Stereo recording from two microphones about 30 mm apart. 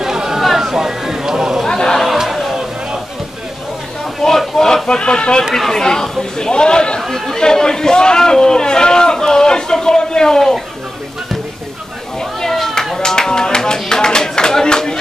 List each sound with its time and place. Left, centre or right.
0.0 s chatter: centre
0.4 s a sound: centre
1.6 s chatter: centre
2.1 s crowd: centre
4.2 s a sound: centre
4.8 s speech: left
5.5 s speech: centre
5.8 s a man's voice: left
12.2 s a sound: centre